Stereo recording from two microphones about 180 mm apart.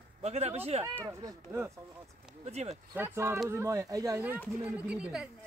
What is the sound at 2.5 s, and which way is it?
Speech, 35° right (ahead or behind).